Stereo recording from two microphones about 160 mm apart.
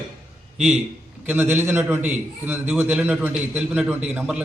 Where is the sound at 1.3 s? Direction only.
10° right (ahead or behind).